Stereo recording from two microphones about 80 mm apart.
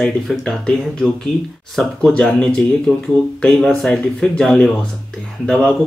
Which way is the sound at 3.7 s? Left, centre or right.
Centre.